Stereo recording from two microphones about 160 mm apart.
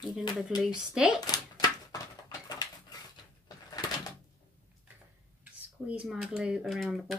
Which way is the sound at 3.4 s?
25° left (ahead or behind).